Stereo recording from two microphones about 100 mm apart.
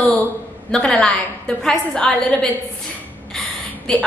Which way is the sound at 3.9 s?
5° left (ahead or behind).